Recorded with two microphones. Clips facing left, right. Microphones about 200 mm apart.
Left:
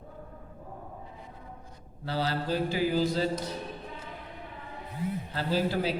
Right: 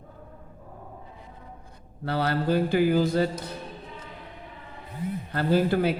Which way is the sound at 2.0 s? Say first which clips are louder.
Right 5 dB; 60° right (ahead or behind).